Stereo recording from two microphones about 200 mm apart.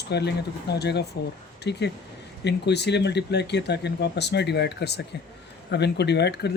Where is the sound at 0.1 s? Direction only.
55° left (ahead or behind).